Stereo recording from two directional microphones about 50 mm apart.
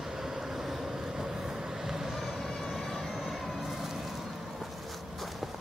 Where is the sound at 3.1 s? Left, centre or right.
Centre.